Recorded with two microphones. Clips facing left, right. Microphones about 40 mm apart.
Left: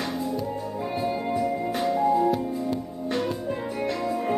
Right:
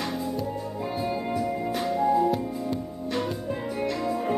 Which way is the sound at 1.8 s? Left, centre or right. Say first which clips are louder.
Left 1 dB; centre.